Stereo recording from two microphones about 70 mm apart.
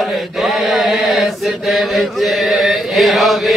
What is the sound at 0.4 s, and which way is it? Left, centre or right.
Chant, centre.